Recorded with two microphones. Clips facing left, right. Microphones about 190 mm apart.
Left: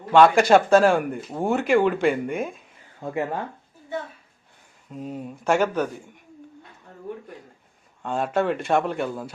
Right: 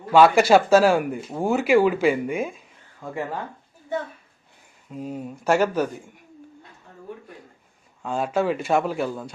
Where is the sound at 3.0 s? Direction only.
20° left (ahead or behind).